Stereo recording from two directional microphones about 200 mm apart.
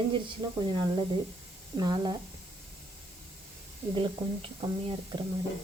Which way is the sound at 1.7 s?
20° right (ahead or behind).